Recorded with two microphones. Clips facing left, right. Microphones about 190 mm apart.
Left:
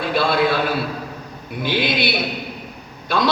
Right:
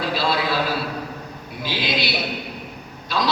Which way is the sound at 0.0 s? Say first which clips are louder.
Left 4 dB; 55° left (ahead or behind).